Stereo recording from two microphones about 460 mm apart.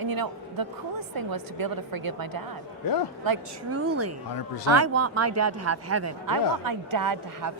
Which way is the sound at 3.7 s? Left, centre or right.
Right.